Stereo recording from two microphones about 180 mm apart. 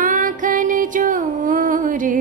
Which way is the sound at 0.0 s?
45° right (ahead or behind).